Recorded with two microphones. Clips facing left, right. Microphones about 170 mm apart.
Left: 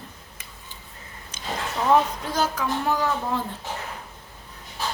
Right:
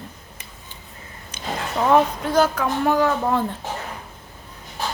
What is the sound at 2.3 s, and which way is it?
Speech, 60° right (ahead or behind).